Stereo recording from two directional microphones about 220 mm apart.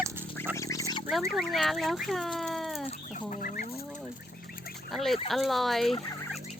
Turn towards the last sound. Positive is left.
turn(degrees=0)  # may be behind; listen again after turning